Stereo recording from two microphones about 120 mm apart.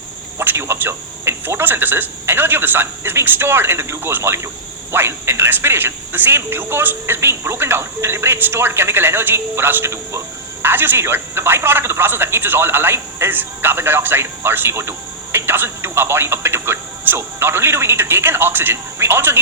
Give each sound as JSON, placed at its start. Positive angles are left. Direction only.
{"t": 0.3, "sound": "a man's voice", "side_deg": -20}